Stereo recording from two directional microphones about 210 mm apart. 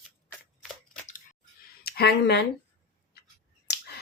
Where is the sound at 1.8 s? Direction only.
50° left (ahead or behind).